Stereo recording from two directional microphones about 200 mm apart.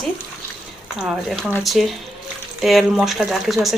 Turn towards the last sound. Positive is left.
turn(degrees=0)  # may be behind; listen again after turning